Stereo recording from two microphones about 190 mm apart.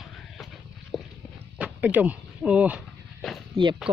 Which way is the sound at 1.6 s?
5° right (ahead or behind).